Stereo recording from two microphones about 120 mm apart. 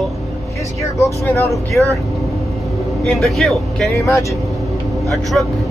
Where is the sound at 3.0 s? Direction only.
Centre (ahead or behind).